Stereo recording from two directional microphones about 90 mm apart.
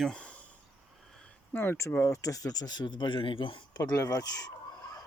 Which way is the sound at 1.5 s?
25° left (ahead or behind).